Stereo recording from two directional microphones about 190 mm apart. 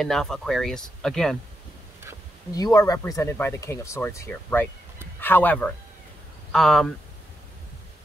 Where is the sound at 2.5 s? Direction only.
20° left (ahead or behind); by 6.9 s centre (ahead or behind).